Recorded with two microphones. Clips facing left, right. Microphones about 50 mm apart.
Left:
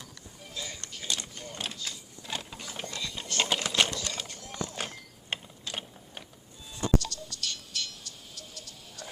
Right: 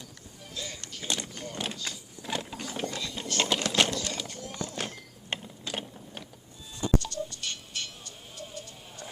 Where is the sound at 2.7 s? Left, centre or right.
Centre.